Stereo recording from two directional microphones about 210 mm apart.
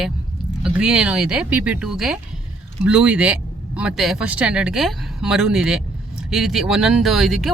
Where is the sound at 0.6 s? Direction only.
5° right (ahead or behind).